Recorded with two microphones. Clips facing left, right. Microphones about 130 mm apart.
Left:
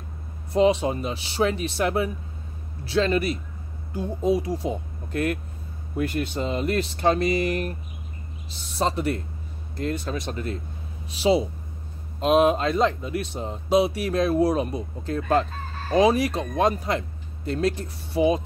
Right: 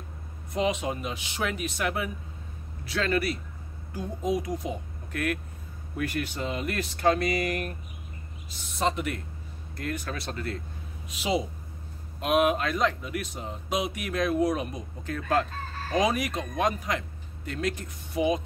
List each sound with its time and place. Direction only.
0.5 s speech: 30° left (ahead or behind)
11.1 s speech: 30° left (ahead or behind)